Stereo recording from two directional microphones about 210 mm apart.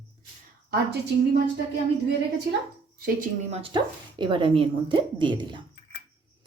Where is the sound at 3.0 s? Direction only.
40° right (ahead or behind).